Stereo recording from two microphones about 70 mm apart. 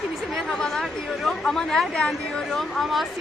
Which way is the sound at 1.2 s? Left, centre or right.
Centre.